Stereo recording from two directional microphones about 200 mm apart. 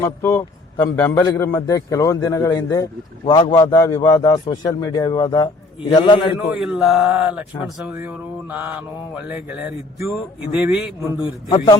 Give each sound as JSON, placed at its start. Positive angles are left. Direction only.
{"t": 0.0, "sound": "a man's voice", "side_deg": 15}
{"t": 6.6, "sound": "a sound", "side_deg": 0}
{"t": 7.9, "sound": "mantra", "side_deg": -10}
{"t": 11.2, "sound": "a man's voice", "side_deg": 20}